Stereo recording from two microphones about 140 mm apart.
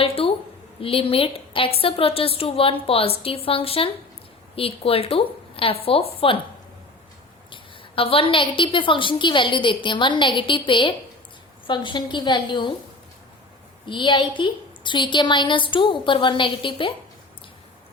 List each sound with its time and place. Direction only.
0.0 s a sound: 45° left (ahead or behind)
0.8 s a woman's voice: 40° left (ahead or behind)
7.5 s a woman's voice: 40° left (ahead or behind)
13.8 s a woman's voice: 35° left (ahead or behind)